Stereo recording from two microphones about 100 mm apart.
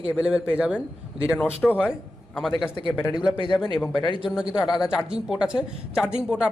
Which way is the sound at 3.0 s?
10° right (ahead or behind).